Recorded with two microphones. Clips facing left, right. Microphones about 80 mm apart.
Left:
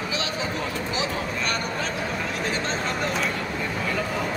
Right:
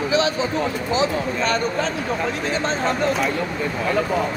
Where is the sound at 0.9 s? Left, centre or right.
Right.